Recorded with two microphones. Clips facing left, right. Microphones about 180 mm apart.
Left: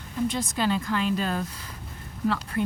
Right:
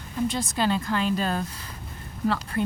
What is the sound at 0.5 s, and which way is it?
Speech, 30° right (ahead or behind).